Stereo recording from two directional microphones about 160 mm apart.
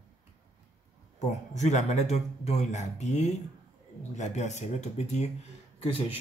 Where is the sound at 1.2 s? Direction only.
45° left (ahead or behind).